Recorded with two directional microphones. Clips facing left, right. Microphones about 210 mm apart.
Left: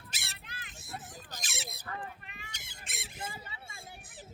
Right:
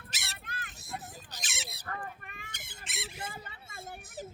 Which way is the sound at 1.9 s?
50° right (ahead or behind).